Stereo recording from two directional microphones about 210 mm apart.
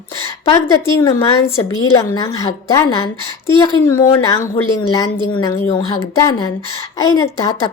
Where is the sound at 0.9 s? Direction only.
15° left (ahead or behind).